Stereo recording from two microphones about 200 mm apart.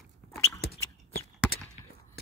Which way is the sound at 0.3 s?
55° left (ahead or behind).